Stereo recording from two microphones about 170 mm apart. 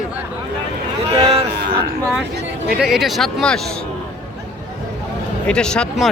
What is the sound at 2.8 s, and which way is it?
Speech, centre (ahead or behind).